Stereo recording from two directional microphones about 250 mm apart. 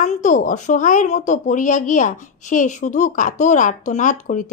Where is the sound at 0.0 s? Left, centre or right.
Left.